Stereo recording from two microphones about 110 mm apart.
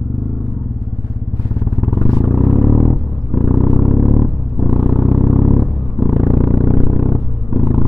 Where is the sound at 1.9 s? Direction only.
Centre (ahead or behind).